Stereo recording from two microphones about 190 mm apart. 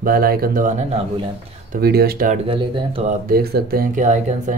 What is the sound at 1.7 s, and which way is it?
Speech, 55° right (ahead or behind).